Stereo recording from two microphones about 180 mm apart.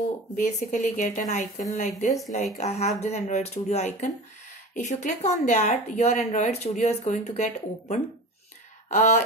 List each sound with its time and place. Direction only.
0.4 s a woman's voice: 40° left (ahead or behind)